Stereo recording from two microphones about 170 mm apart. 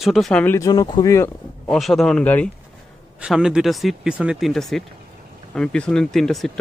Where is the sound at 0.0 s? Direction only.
Centre (ahead or behind).